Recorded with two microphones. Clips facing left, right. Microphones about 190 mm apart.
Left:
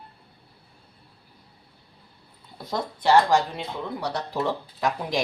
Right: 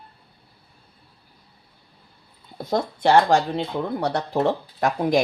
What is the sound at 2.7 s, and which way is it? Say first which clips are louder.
Speech: right 2 dB; 55° right (ahead or behind).